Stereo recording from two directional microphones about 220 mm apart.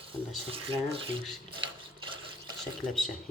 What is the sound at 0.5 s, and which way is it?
Speech, 25° right (ahead or behind).